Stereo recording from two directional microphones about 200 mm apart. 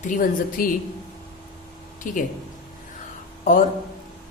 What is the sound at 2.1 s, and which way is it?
Speech, 40° left (ahead or behind).